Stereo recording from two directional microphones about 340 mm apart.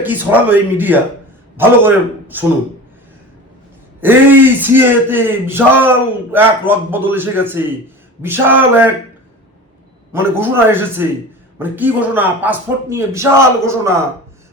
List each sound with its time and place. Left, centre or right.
0.0 s a man's voice: centre
4.0 s a man's voice: centre
10.1 s a man's voice: centre